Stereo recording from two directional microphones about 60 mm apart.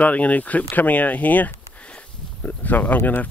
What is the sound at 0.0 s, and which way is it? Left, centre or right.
Speech, left.